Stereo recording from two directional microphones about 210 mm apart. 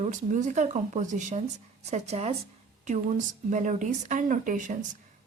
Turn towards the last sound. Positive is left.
turn(degrees=-35)  # may be behind; listen again after turning